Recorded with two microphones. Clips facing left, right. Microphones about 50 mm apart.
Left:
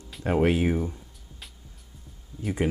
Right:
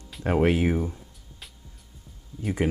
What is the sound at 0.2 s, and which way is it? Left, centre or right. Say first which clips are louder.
Speech: right 1 dB; centre.